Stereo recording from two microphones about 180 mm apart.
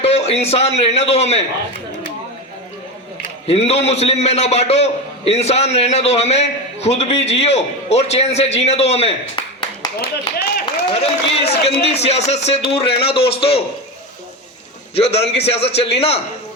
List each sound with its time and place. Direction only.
0.0 s a man's voice: 35° left (ahead or behind)
3.4 s a man's voice: 35° left (ahead or behind)
10.9 s a man's voice: 35° left (ahead or behind)
14.9 s a man's voice: 35° left (ahead or behind)